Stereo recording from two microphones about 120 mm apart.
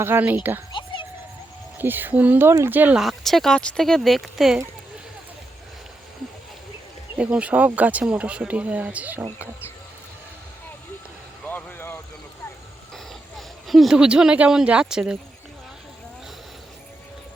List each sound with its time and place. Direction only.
0.0 s speech: 15° right (ahead or behind)
0.7 s a sound: 40° left (ahead or behind)
1.8 s speech: 15° right (ahead or behind)
3.0 s speech: centre (ahead or behind)
7.2 s speech: 10° right (ahead or behind)
11.4 s vehicle: 15° left (ahead or behind)
12.9 s speech: centre (ahead or behind)